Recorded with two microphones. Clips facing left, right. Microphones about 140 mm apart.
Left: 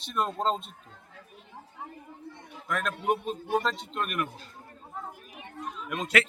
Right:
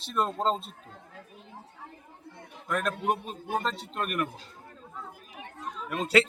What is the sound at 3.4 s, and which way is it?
Speech, 40° right (ahead or behind).